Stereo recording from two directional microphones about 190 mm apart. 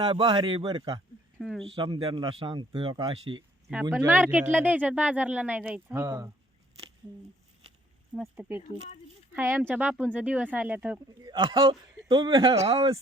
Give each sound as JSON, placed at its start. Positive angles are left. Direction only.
{"t": 0.0, "sound": "speech", "side_deg": -25}
{"t": 1.4, "sound": "a sound", "side_deg": 0}
{"t": 1.6, "sound": "speech", "side_deg": -25}
{"t": 3.8, "sound": "speech", "side_deg": -10}
{"t": 8.1, "sound": "speech", "side_deg": -5}